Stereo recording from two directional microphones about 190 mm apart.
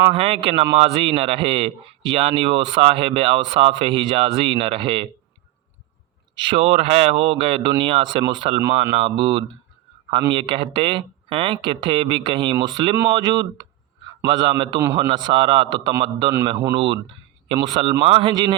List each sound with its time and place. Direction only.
0.1 s speech: 30° right (ahead or behind)
6.3 s speech: 25° right (ahead or behind)